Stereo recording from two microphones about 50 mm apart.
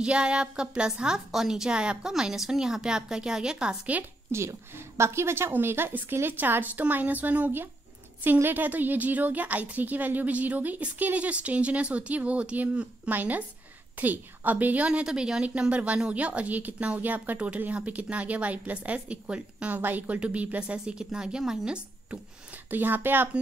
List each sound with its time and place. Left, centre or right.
0.0 s a woman's voice: centre
4.3 s a woman's voice: right
6.4 s a woman's voice: right
14.9 s a woman's voice: centre
19.8 s a woman's voice: right; by 22.2 s centre
22.7 s a woman's voice: right